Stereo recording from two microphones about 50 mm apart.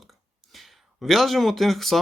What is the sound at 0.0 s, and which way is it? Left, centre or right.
Speech, centre.